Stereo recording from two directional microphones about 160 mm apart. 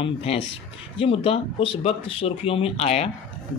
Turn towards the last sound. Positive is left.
turn(degrees=40)  # may be behind; listen again after turning